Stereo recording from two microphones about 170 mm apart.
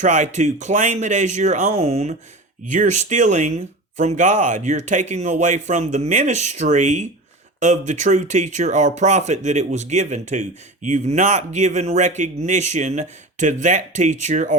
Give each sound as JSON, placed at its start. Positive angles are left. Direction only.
{"t": 0.0, "sound": "speech", "side_deg": -45}